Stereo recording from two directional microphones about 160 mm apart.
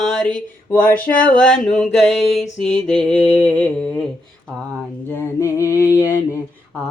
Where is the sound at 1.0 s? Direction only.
60° left (ahead or behind).